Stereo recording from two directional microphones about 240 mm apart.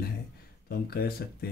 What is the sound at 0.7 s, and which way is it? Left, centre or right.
Speech, left.